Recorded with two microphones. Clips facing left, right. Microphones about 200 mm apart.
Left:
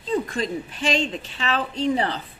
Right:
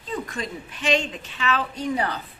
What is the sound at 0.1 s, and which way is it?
A woman's voice, 30° left (ahead or behind).